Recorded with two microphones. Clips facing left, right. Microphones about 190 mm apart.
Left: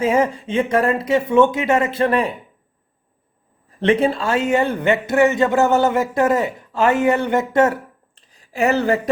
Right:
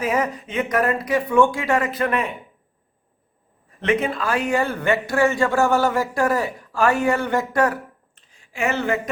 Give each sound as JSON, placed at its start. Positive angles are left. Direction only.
{"t": 0.0, "sound": "a man's voice", "side_deg": 25}
{"t": 3.8, "sound": "a man's voice", "side_deg": 30}